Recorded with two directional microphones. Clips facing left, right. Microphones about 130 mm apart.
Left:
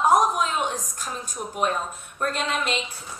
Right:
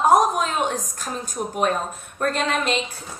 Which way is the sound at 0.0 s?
35° right (ahead or behind).